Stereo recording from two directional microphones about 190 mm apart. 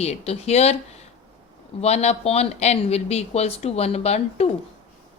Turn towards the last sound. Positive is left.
turn(degrees=35)  # may be behind; listen again after turning